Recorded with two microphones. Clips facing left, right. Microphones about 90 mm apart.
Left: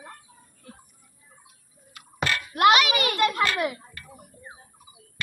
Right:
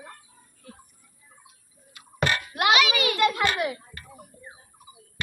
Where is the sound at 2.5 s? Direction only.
45° left (ahead or behind).